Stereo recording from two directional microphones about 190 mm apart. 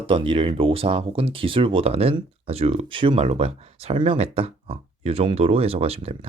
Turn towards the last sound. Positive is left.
turn(degrees=-30)  # may be behind; listen again after turning